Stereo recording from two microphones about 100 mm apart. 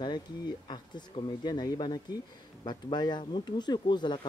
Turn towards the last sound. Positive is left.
turn(degrees=50)  # may be behind; listen again after turning